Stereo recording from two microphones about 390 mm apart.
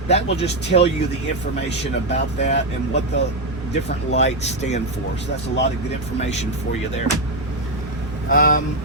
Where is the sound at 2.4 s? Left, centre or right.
Left.